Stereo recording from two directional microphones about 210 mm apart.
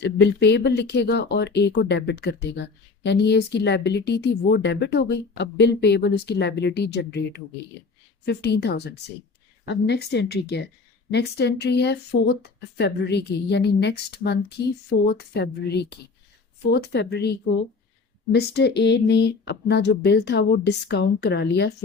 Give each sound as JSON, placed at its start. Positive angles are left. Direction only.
{"t": 0.0, "sound": "speech", "side_deg": 55}